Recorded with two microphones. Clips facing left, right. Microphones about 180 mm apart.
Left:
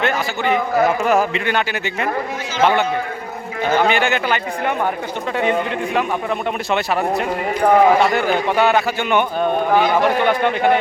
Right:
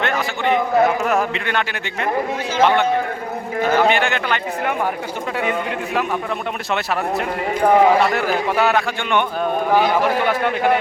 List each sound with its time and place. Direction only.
0.0 s a man's voice: centre (ahead or behind)
3.6 s a man's voice: centre (ahead or behind)
7.6 s a man's voice: centre (ahead or behind)